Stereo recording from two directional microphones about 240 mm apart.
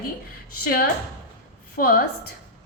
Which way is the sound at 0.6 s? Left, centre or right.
Left.